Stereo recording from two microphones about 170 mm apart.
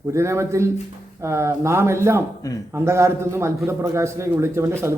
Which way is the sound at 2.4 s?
20° left (ahead or behind).